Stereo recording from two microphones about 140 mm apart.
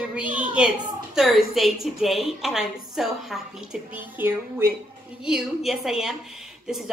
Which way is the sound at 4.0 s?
15° right (ahead or behind).